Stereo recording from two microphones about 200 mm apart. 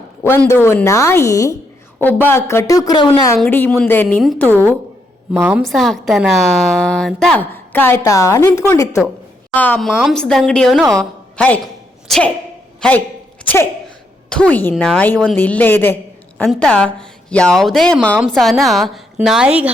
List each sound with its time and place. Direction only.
0.2 s a woman's voice: 10° left (ahead or behind)
5.3 s a woman's voice: 5° right (ahead or behind)